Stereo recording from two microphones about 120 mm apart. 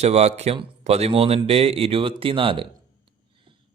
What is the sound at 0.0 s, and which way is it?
Speech, 65° right (ahead or behind).